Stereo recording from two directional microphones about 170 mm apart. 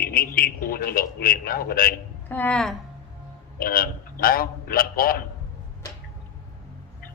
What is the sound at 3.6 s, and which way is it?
A man's voice, 60° left (ahead or behind).